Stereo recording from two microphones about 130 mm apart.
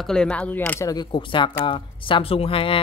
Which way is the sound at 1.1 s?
40° left (ahead or behind).